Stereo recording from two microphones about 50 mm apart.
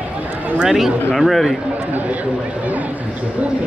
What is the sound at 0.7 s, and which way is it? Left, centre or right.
Speech, centre.